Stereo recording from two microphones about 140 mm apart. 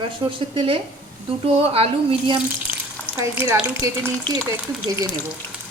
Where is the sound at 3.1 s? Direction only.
15° right (ahead or behind).